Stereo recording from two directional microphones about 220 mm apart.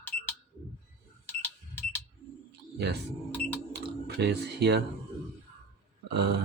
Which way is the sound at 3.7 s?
50° right (ahead or behind).